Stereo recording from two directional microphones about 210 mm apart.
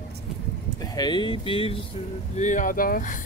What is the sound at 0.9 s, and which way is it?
Speech, 20° left (ahead or behind).